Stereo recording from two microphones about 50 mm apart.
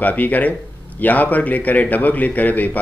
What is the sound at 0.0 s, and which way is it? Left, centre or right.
Speech, left.